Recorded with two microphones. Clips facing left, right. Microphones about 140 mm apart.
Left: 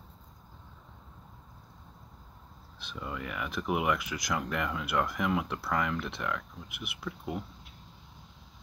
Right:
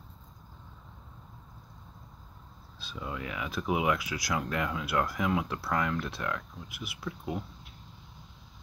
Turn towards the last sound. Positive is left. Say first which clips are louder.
# right 1 dB
turn(degrees=0)  # may be behind; listen again after turning